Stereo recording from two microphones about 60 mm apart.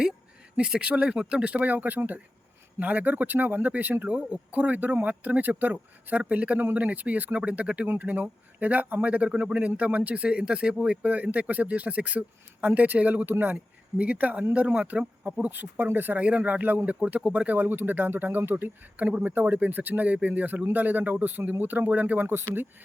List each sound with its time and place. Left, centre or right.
0.5 s speech: centre; by 4.1 s right
4.1 s speech: right
11.0 s speech: right
15.4 s speech: right